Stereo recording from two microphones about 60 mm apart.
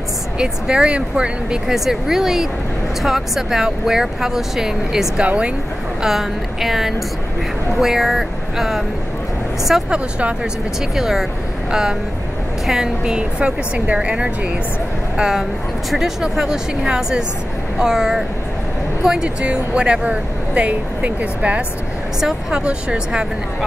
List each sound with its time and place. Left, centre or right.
0.4 s speech: centre
1.7 s speech: centre
5.2 s speech: right
6.0 s speech: centre
9.8 s speech: centre
11.0 s speech: centre
12.6 s speech: centre